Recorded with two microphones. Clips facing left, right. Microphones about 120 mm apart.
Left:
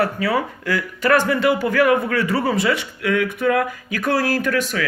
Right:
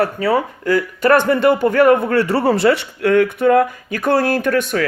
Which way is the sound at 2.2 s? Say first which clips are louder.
Right 4 dB; 65° right (ahead or behind).